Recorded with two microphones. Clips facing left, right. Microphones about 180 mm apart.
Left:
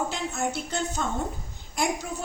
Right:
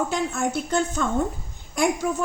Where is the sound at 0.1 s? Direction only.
50° right (ahead or behind).